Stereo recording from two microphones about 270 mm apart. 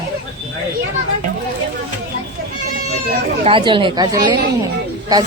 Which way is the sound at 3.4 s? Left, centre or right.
Centre.